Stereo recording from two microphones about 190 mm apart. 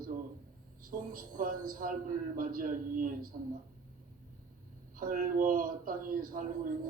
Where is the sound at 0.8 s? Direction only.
45° right (ahead or behind).